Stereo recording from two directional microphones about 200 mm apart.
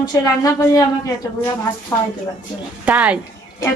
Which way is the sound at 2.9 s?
5° right (ahead or behind).